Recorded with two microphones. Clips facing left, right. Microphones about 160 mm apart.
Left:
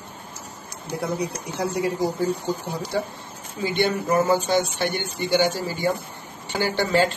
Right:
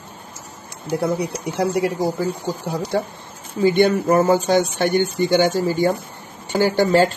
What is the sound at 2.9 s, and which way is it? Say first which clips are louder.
Speech: right 4 dB; 55° right (ahead or behind).